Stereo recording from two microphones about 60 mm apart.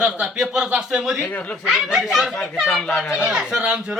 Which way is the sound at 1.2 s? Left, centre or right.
Left.